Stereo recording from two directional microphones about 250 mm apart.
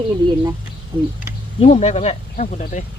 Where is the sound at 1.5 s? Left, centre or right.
Left.